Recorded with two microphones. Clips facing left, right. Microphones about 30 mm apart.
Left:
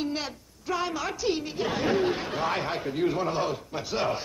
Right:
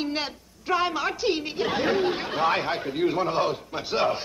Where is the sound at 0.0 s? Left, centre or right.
Right.